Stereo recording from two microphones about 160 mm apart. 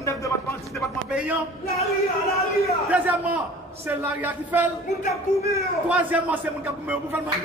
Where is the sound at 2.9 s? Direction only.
10° right (ahead or behind).